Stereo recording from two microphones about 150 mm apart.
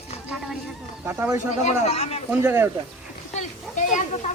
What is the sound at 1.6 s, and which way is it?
Speech, 45° left (ahead or behind).